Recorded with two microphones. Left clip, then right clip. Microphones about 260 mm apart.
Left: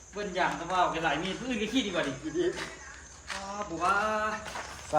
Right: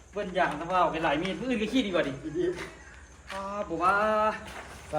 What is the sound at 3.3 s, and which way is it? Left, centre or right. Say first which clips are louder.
Speech: right 1 dB; left.